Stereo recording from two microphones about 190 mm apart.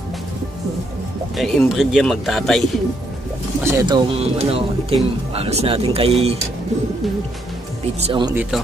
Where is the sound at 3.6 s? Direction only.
20° right (ahead or behind).